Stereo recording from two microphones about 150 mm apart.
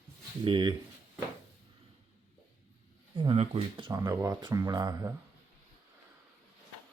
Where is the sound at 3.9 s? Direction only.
20° right (ahead or behind).